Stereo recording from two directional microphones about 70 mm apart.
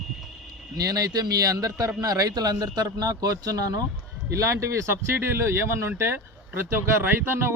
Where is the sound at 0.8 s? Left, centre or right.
Right.